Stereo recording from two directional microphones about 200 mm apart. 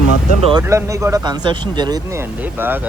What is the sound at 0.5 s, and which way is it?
Speech, 15° right (ahead or behind).